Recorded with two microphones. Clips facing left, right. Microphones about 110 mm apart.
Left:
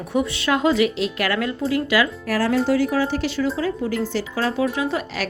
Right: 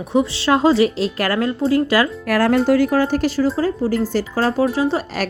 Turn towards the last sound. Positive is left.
turn(degrees=-30)  # may be behind; listen again after turning